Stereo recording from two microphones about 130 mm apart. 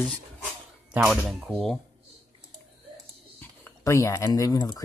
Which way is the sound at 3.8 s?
25° left (ahead or behind).